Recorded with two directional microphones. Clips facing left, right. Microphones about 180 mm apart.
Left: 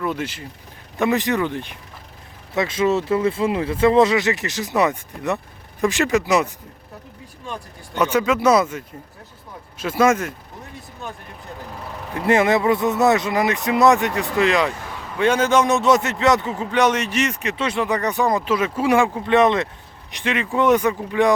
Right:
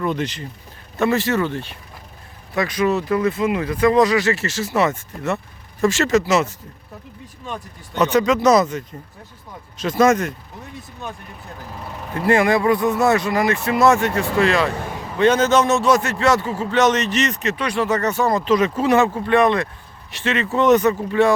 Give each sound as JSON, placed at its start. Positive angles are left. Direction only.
{"t": 0.0, "sound": "speech", "side_deg": 5}
{"t": 7.5, "sound": "speech", "side_deg": 10}
{"t": 12.1, "sound": "speech", "side_deg": 20}